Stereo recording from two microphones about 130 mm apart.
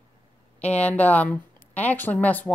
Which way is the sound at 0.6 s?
10° left (ahead or behind).